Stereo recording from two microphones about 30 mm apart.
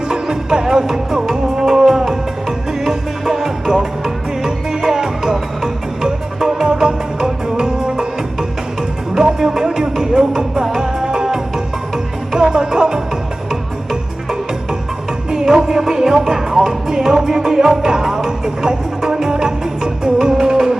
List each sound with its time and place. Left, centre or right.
0.1 s music: right
12.4 s music: right
15.3 s music: right
17.2 s music: centre